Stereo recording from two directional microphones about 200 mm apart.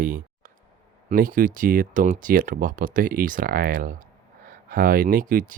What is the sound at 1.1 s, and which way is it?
Speech, 45° right (ahead or behind).